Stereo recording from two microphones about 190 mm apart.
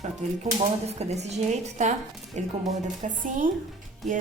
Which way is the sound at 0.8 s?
35° right (ahead or behind).